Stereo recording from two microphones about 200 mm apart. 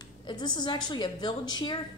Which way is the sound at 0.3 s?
20° left (ahead or behind).